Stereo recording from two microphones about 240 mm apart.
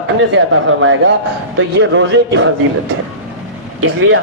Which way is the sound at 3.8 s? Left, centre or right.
Right.